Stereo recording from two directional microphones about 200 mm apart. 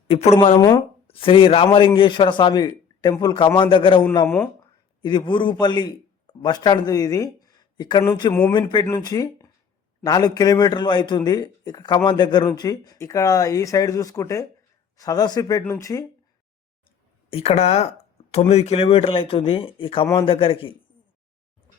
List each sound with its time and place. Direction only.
0.1 s speech: 30° left (ahead or behind)
5.0 s a man's voice: 25° left (ahead or behind)
8.5 s speech: 20° left (ahead or behind)
17.3 s speech: 30° left (ahead or behind)